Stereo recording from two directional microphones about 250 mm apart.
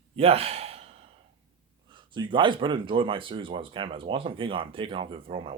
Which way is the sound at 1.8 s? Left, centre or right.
Centre.